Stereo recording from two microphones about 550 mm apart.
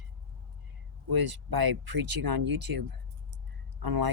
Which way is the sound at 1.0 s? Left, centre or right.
Right.